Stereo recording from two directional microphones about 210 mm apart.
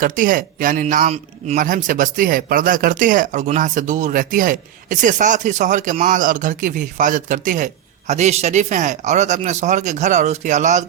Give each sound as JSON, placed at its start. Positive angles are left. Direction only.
{"t": 0.0, "sound": "speech", "side_deg": -40}